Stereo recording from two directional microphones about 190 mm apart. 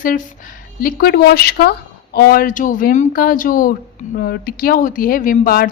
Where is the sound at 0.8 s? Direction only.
50° left (ahead or behind).